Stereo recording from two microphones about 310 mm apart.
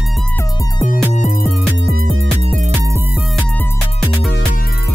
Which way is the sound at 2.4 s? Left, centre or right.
Right.